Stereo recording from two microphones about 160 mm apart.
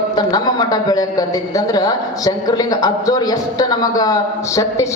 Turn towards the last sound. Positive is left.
turn(degrees=20)  # may be behind; listen again after turning